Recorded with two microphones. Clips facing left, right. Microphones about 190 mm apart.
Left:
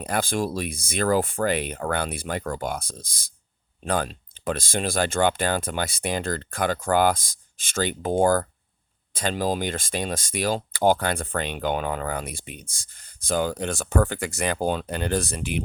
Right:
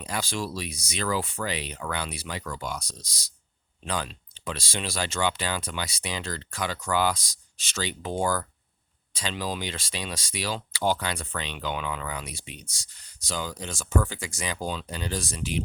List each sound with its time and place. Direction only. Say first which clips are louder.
0.0 s speech: left 6 dB; 55° left (ahead or behind)